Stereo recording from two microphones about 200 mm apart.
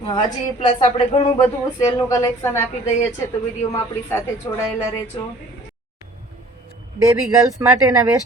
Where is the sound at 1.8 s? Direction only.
15° left (ahead or behind).